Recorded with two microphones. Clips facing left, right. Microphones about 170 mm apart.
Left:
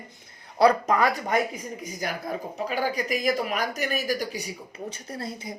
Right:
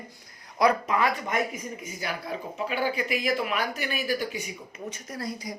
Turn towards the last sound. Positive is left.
turn(degrees=25)  # may be behind; listen again after turning